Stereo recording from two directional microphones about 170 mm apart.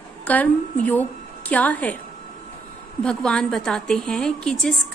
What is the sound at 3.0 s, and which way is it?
A woman's voice, 5° left (ahead or behind).